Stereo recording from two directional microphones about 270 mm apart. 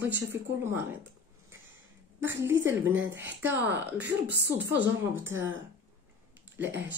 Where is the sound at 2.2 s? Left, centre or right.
Centre.